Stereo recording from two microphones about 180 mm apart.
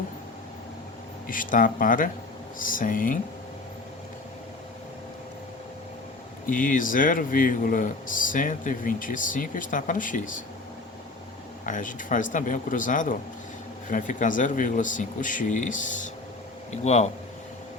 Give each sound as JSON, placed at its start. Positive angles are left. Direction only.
{"t": 1.3, "sound": "speech", "side_deg": 50}
{"t": 6.5, "sound": "speech", "side_deg": 50}
{"t": 11.6, "sound": "speech", "side_deg": 45}